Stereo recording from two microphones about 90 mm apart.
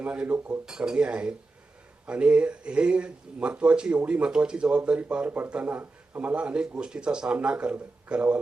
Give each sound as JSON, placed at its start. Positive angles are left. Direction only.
{"t": 0.0, "sound": "speech", "side_deg": -15}
{"t": 0.6, "sound": "speech", "side_deg": -5}